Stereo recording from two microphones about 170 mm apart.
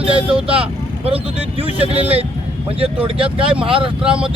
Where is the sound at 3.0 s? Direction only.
30° right (ahead or behind).